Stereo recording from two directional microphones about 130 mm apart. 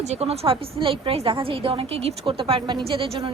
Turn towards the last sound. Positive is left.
turn(degrees=-40)  # may be behind; listen again after turning